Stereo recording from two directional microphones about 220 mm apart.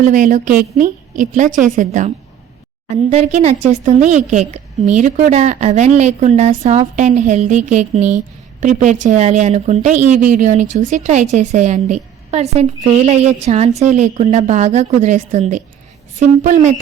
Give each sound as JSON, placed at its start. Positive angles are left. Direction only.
{"t": 0.0, "sound": "a woman's voice", "side_deg": -35}